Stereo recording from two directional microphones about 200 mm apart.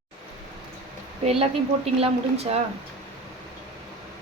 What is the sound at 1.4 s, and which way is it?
A woman's voice, 30° right (ahead or behind).